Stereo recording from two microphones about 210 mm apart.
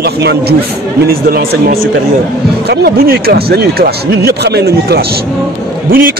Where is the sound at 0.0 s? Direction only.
50° right (ahead or behind).